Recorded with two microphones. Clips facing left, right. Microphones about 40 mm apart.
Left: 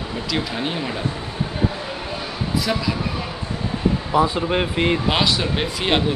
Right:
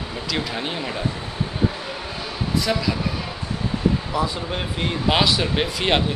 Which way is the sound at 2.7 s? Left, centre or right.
Centre.